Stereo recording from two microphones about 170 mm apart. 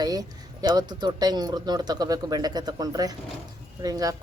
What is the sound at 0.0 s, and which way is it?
Speech, 20° right (ahead or behind).